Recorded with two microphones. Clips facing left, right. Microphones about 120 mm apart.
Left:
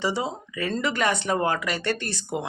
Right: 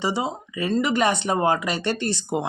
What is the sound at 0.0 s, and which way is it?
Speech, 15° right (ahead or behind).